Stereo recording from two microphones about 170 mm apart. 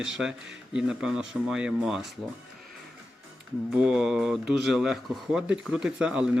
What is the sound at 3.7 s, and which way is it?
Speech, 5° right (ahead or behind).